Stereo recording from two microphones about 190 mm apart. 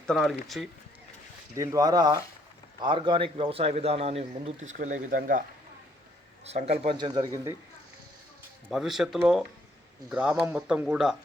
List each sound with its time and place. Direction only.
0.1 s speech: centre (ahead or behind)
1.5 s speech: 15° right (ahead or behind); by 5.4 s 45° right (ahead or behind)
6.4 s speech: 35° right (ahead or behind)
8.7 s speech: centre (ahead or behind)